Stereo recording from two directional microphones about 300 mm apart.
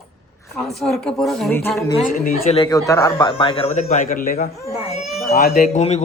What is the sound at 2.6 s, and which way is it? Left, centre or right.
A man's voice, centre.